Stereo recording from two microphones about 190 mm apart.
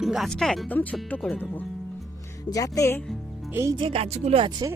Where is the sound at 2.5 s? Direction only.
20° left (ahead or behind).